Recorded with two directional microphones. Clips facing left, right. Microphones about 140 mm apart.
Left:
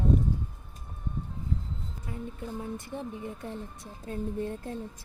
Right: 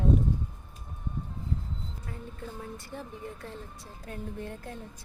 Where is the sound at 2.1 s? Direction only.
15° left (ahead or behind).